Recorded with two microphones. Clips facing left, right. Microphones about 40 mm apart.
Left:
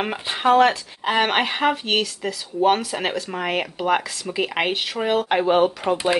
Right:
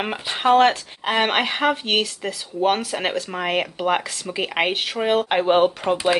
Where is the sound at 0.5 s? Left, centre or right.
Right.